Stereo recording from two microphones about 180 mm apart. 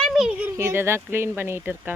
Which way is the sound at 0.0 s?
Centre (ahead or behind).